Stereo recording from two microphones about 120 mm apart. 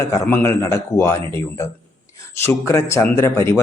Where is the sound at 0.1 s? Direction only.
25° left (ahead or behind).